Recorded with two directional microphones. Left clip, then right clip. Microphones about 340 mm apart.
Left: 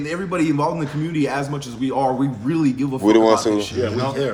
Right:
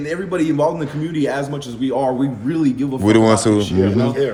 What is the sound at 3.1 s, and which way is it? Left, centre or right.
Speech, centre.